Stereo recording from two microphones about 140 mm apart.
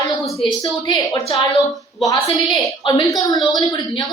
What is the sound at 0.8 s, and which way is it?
A woman's voice, 30° left (ahead or behind).